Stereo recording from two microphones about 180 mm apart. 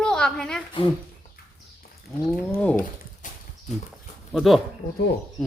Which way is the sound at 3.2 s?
45° left (ahead or behind).